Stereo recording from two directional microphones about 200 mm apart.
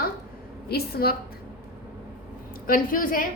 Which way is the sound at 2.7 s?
45° left (ahead or behind).